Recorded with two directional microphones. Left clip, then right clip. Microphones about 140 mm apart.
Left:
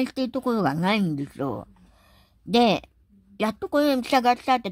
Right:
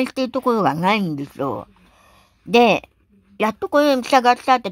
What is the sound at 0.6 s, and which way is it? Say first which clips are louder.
Speech: right 6 dB; 30° left (ahead or behind).